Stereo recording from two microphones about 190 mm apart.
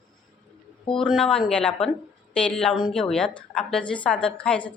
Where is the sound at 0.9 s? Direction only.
5° left (ahead or behind).